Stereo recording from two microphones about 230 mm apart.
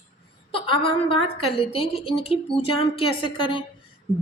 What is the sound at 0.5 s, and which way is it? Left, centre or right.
Speech, left.